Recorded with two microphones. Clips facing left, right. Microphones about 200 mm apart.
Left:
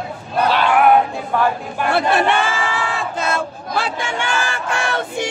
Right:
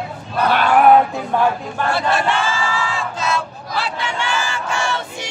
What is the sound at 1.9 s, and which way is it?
Crowd, 60° left (ahead or behind).